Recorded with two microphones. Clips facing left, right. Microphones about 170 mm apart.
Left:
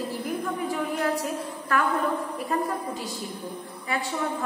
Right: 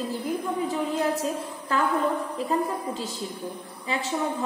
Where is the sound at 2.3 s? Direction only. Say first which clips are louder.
Right 1 dB; 25° right (ahead or behind).